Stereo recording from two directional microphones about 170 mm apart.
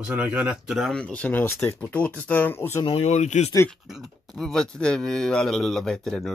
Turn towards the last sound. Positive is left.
turn(degrees=5)  # may be behind; listen again after turning